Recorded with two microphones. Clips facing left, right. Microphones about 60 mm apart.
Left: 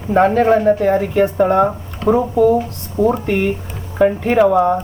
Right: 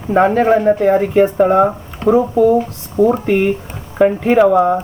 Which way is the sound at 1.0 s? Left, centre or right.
Centre.